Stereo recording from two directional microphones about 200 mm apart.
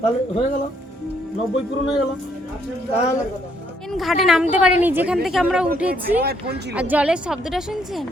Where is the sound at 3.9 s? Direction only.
Centre (ahead or behind).